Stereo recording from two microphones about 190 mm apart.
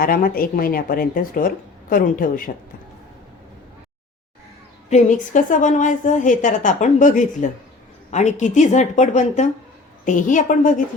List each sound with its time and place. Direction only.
0.0 s a woman's voice: 50° left (ahead or behind)
4.9 s a woman's voice: 40° left (ahead or behind)